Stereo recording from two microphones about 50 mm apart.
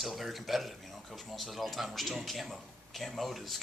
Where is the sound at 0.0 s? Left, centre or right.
Centre.